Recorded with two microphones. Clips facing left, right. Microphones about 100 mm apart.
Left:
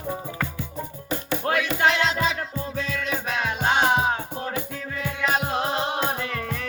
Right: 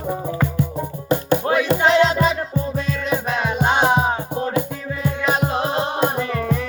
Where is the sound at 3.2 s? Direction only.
15° right (ahead or behind).